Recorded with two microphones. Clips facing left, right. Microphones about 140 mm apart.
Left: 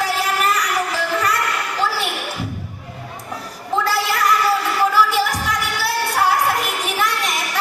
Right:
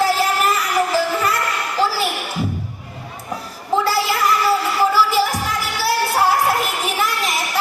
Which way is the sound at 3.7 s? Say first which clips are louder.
Right 2 dB; centre (ahead or behind).